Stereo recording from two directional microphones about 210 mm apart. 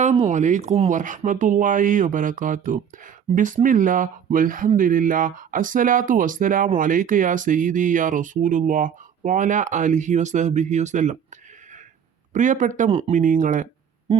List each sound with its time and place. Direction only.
0.0 s speech: 35° right (ahead or behind)
12.3 s speech: 35° right (ahead or behind)